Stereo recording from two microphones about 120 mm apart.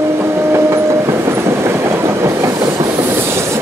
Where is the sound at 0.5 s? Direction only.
20° right (ahead or behind).